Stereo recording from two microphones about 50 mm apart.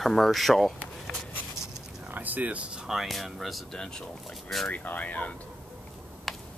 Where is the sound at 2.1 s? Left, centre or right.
Right.